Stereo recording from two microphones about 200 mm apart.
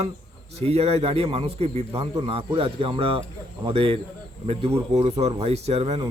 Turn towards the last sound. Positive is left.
turn(degrees=-30)  # may be behind; listen again after turning